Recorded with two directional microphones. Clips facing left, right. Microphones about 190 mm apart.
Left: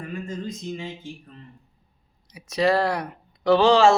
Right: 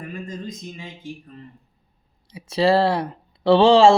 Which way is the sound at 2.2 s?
30° right (ahead or behind).